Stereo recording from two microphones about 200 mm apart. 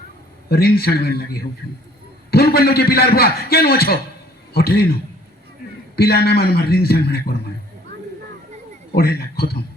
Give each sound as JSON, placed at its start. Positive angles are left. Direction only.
{"t": 0.4, "sound": "a man's voice", "side_deg": 50}
{"t": 5.6, "sound": "a sound", "side_deg": 50}
{"t": 6.0, "sound": "a man's voice", "side_deg": 50}
{"t": 8.9, "sound": "speech", "side_deg": 50}